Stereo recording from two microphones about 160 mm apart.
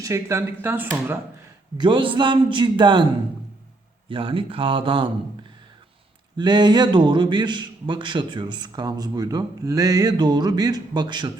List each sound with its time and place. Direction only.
0.0 s speech: 20° right (ahead or behind)
1.8 s a man's voice: 30° right (ahead or behind)
4.1 s speech: 35° right (ahead or behind)
6.3 s a man's voice: 25° right (ahead or behind)